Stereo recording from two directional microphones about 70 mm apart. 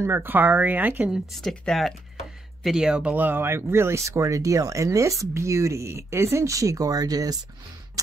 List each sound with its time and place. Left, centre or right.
0.0 s speech: right
1.5 s speech: centre
2.6 s speech: centre; by 7.3 s right